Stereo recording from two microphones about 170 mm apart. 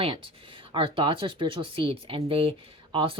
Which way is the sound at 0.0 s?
30° right (ahead or behind).